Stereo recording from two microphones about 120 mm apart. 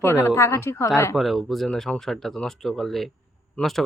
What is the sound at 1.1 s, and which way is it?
Speech, centre (ahead or behind).